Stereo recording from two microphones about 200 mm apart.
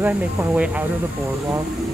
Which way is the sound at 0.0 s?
10° right (ahead or behind).